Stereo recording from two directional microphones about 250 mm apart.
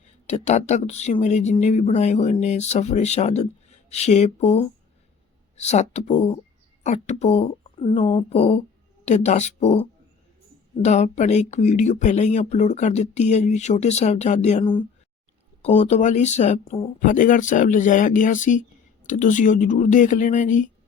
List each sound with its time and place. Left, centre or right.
0.0 s speech: left
10.8 s speech: left